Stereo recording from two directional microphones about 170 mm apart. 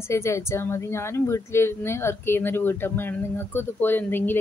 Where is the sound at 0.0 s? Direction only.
15° left (ahead or behind).